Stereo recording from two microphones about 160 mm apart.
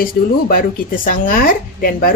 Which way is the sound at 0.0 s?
65° left (ahead or behind).